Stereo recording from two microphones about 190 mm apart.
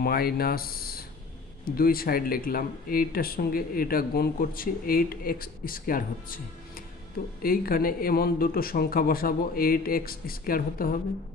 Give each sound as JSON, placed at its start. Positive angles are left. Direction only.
{"t": 0.0, "sound": "speech", "side_deg": 50}
{"t": 7.4, "sound": "speech", "side_deg": 50}